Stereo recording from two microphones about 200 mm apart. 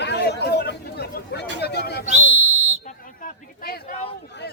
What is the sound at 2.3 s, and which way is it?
Whistle, 35° right (ahead or behind).